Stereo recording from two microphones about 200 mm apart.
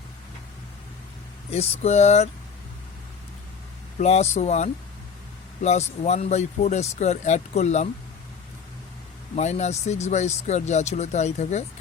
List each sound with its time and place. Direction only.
1.5 s speech: 30° left (ahead or behind)
3.9 s speech: 35° left (ahead or behind)
9.3 s speech: 35° left (ahead or behind)